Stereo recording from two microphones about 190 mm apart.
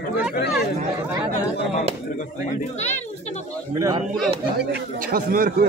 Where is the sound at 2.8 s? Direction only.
35° left (ahead or behind).